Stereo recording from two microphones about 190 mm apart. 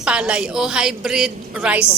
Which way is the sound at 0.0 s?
5° right (ahead or behind).